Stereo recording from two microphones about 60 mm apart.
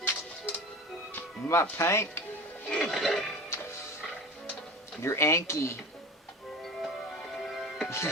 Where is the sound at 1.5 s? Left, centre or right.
Left.